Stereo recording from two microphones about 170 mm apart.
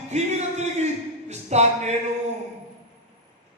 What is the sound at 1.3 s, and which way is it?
Speech, 40° right (ahead or behind).